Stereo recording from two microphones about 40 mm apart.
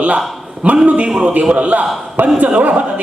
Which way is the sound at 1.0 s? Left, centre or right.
Right.